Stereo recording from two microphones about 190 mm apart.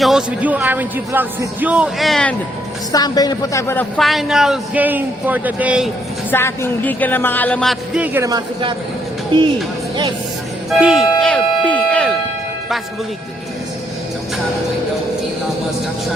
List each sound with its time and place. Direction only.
0.0 s speech: centre (ahead or behind)
2.9 s a woman's voice: 20° left (ahead or behind)
3.9 s a man's voice: centre (ahead or behind)
6.3 s speech: 10° left (ahead or behind); by 9.5 s 25° right (ahead or behind)
10.7 s a sound: centre (ahead or behind)